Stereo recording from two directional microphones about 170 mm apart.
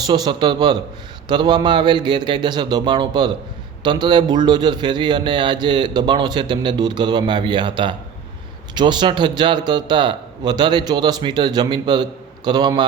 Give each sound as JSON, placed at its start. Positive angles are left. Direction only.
{"t": 0.1, "sound": "a man's voice", "side_deg": -25}